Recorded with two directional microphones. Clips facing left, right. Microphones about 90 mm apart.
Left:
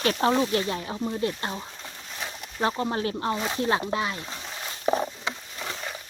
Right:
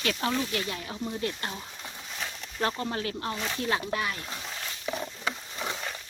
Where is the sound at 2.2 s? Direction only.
10° left (ahead or behind).